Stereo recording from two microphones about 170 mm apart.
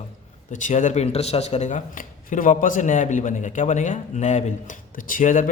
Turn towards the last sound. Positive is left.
turn(degrees=50)  # may be behind; listen again after turning